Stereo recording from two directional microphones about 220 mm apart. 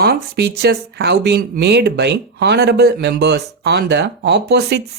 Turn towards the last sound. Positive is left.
turn(degrees=-50)  # may be behind; listen again after turning